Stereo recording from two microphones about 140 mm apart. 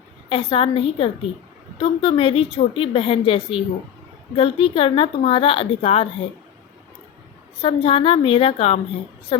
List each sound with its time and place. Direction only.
0.3 s a woman's voice: 40° left (ahead or behind)
7.6 s a woman's voice: 40° left (ahead or behind)